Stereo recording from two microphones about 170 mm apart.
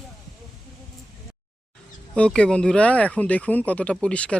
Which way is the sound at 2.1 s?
5° left (ahead or behind).